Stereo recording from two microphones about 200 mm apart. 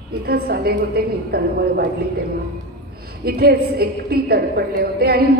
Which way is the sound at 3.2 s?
50° right (ahead or behind).